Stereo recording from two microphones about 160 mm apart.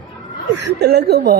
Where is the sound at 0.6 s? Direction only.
90° right.